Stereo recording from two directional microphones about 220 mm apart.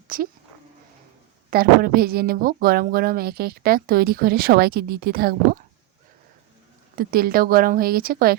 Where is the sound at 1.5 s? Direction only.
40° right (ahead or behind).